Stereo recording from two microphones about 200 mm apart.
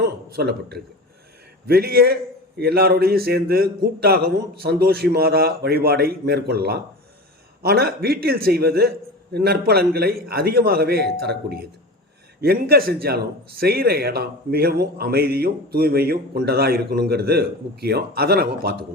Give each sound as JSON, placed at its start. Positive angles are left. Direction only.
{"t": 0.0, "sound": "a man's voice", "side_deg": -55}